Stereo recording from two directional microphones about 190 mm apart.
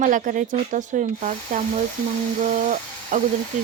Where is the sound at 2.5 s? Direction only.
40° right (ahead or behind).